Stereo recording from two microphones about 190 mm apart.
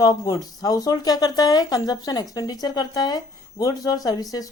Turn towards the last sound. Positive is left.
turn(degrees=20)  # may be behind; listen again after turning